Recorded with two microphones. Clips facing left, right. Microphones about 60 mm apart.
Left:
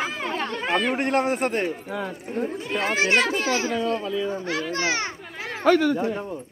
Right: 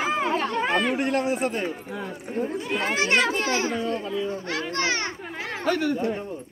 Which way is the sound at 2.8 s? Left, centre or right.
Centre.